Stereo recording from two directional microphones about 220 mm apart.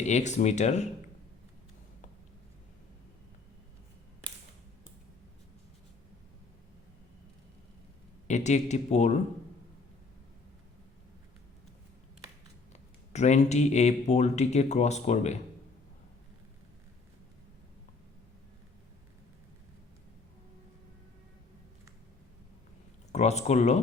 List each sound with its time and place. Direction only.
0.0 s speech: 35° left (ahead or behind)
8.3 s speech: 30° left (ahead or behind)
13.1 s speech: 30° left (ahead or behind)
23.1 s speech: 30° left (ahead or behind)